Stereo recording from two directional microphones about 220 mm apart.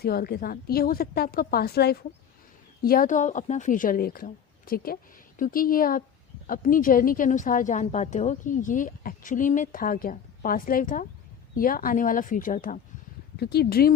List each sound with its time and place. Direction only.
0.0 s a woman's voice: 45° left (ahead or behind)
13.3 s a woman's voice: 45° left (ahead or behind)